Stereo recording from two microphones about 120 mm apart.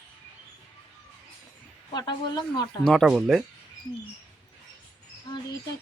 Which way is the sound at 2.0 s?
35° left (ahead or behind).